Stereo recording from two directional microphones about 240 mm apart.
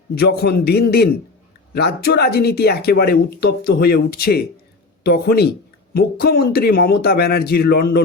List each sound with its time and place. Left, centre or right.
0.1 s speech: left